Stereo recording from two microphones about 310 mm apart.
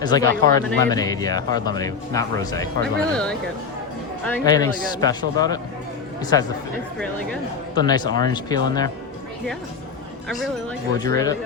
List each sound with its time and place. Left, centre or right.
0.0 s speech: centre
0.3 s speech: right
0.9 s speech: centre
7.8 s speech: centre
11.0 s speech: centre